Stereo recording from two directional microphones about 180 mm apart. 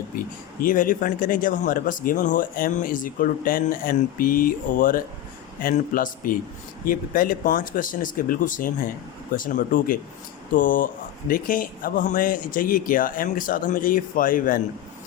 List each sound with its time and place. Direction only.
0.2 s speech: 50° left (ahead or behind)